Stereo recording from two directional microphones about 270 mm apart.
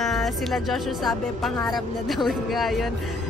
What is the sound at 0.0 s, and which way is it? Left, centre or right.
Speech, centre.